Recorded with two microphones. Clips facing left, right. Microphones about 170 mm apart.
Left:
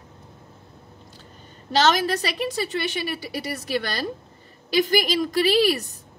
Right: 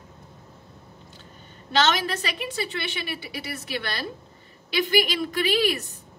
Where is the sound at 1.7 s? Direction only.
40° left (ahead or behind).